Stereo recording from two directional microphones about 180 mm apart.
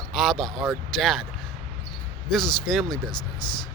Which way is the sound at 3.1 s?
25° left (ahead or behind).